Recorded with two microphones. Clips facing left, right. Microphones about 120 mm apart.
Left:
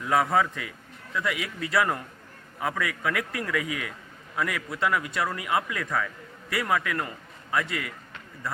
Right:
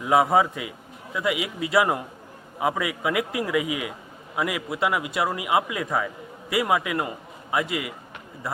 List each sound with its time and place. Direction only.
0.0 s a man's voice: 15° right (ahead or behind)